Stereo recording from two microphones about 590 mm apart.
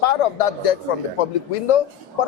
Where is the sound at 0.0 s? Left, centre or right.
Left.